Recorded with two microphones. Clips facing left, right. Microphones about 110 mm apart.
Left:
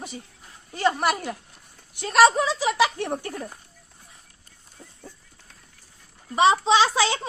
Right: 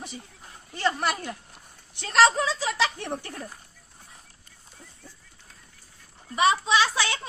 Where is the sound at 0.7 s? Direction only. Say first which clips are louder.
Left 4 dB; 15° left (ahead or behind).